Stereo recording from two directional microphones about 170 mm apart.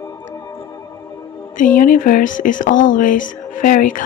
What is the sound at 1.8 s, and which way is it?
Music, 50° left (ahead or behind).